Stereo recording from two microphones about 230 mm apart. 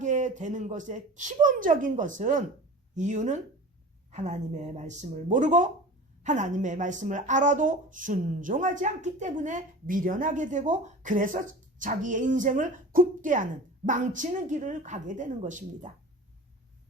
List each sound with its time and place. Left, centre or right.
0.0 s speech: right